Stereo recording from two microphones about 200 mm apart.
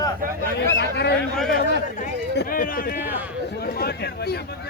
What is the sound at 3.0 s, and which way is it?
Speech, 10° right (ahead or behind).